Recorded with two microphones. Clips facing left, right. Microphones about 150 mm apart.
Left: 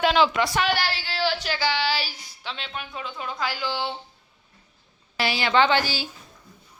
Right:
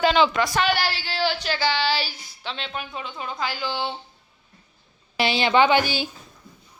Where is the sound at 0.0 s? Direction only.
Centre (ahead or behind).